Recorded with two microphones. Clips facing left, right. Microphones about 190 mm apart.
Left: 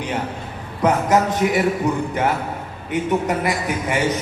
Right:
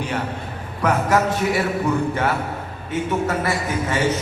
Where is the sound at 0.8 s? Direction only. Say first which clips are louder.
Left 2 dB; 20° left (ahead or behind).